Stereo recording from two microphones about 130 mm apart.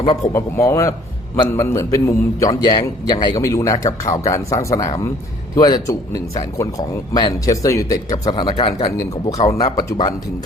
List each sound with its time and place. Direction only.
0.3 s speech: 20° left (ahead or behind)
2.5 s speech: 40° left (ahead or behind)
9.5 s speech: 30° left (ahead or behind)